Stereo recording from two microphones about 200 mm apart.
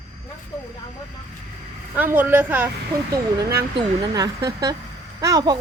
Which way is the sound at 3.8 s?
20° right (ahead or behind).